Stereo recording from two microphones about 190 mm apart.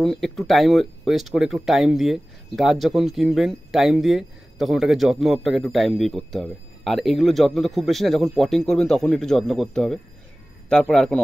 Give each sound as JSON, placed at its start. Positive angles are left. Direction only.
{"t": 0.0, "sound": "speech", "side_deg": 0}